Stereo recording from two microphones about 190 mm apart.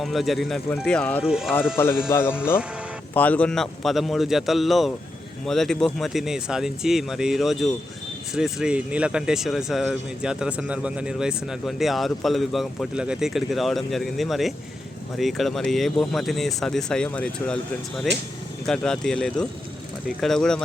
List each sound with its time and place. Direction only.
0.0 s speech: centre (ahead or behind)
1.2 s speech: 5° right (ahead or behind)
2.1 s speech: 15° left (ahead or behind)